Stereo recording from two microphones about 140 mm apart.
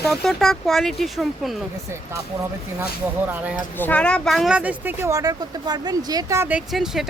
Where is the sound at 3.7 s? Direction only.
10° left (ahead or behind); by 6.5 s 25° right (ahead or behind).